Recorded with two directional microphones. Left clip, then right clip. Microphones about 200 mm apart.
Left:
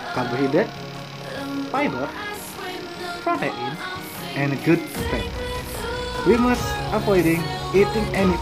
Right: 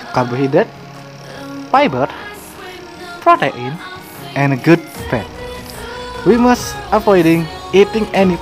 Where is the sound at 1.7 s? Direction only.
50° right (ahead or behind).